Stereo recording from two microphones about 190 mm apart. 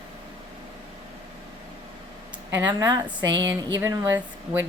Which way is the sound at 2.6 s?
20° right (ahead or behind).